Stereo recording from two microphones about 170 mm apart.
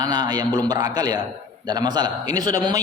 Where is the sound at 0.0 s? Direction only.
25° right (ahead or behind).